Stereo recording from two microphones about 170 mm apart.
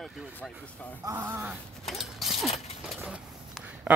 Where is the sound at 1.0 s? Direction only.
15° right (ahead or behind).